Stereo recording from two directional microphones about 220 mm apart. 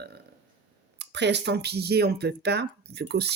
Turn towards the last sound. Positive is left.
turn(degrees=-50)  # may be behind; listen again after turning